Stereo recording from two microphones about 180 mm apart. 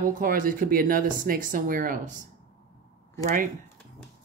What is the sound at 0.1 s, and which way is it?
Speech, 50° right (ahead or behind).